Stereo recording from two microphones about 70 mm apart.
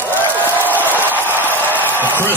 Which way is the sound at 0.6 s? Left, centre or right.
Left.